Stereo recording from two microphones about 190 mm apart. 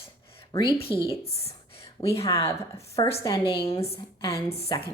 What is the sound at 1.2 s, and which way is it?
A woman's voice, 30° left (ahead or behind).